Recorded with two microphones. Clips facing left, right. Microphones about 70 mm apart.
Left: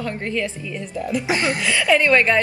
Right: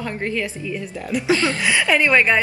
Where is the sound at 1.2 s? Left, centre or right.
Left.